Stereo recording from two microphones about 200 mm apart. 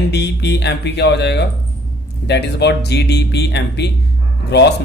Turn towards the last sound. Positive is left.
turn(degrees=60)  # may be behind; listen again after turning